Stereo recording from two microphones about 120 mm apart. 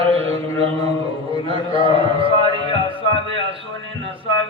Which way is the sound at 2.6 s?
45° left (ahead or behind).